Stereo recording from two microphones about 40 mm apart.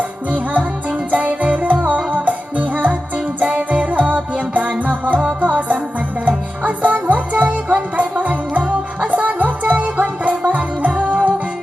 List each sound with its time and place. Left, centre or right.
0.3 s music: right